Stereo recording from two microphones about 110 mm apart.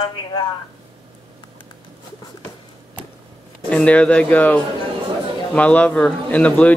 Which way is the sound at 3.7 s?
10° left (ahead or behind).